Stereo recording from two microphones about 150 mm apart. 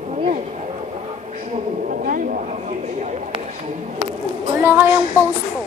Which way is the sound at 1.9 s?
65° right (ahead or behind).